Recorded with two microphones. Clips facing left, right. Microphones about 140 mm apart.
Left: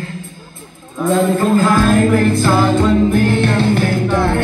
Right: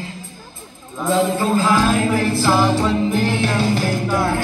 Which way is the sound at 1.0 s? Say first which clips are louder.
Left 4 dB; 55° left (ahead or behind).